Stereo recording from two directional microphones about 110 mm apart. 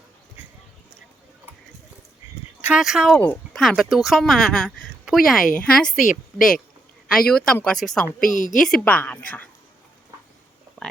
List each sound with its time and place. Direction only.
2.2 s a sound: 25° right (ahead or behind)
2.6 s speech: 5° right (ahead or behind)
3.2 s speech: 15° left (ahead or behind)
3.6 s speech: centre (ahead or behind)
7.1 s a woman's voice: 5° left (ahead or behind)
10.8 s a sound: 10° left (ahead or behind)